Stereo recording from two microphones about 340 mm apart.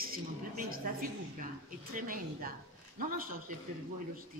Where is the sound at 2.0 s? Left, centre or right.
Right.